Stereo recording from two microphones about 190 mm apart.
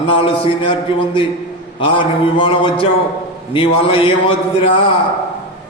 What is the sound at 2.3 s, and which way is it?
Mantra, 25° left (ahead or behind).